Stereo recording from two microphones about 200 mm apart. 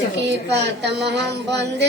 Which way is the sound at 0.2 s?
60° right (ahead or behind).